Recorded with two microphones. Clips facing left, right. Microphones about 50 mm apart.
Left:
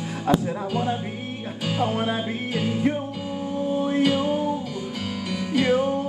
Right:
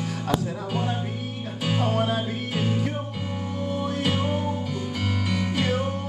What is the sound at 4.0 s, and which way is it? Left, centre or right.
Music, centre.